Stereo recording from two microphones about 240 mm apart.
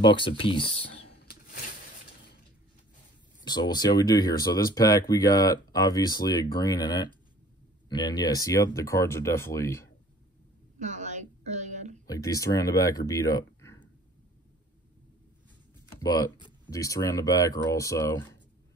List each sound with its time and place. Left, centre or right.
0.0 s speech: left
1.1 s a sound: left
3.4 s speech: centre
10.8 s a sound: right
12.1 s speech: centre
16.0 s speech: centre